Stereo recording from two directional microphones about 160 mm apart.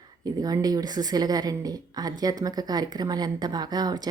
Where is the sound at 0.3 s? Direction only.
25° right (ahead or behind).